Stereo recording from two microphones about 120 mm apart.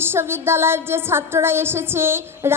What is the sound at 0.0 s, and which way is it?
Music, 20° right (ahead or behind).